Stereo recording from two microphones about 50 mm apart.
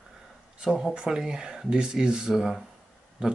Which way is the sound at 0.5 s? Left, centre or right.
Centre.